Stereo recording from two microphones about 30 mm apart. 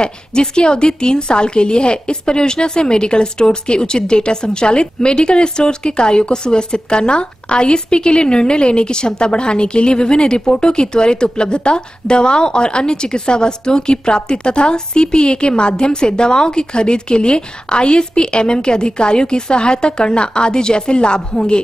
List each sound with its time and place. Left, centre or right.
0.0 s a woman's voice: left